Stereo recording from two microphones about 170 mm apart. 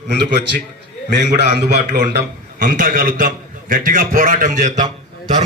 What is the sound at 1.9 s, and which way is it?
A man's voice, 65° right (ahead or behind).